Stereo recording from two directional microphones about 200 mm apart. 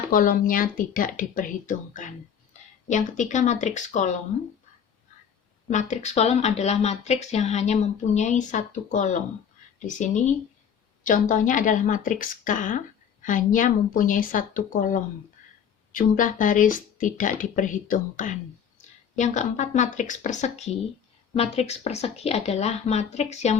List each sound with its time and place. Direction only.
0.1 s speech: 45° left (ahead or behind)
5.7 s speech: 35° left (ahead or behind)